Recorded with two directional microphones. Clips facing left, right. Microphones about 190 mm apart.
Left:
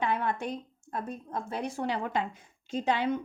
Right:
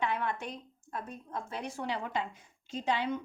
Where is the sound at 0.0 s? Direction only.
40° left (ahead or behind).